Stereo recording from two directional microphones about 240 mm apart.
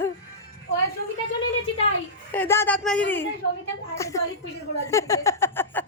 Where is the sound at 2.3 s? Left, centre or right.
Centre.